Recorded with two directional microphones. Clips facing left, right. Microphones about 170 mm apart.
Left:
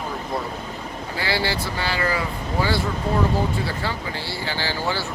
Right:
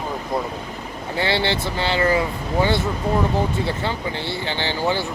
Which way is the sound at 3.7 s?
20° right (ahead or behind).